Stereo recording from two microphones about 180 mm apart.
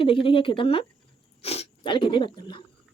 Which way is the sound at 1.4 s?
35° left (ahead or behind).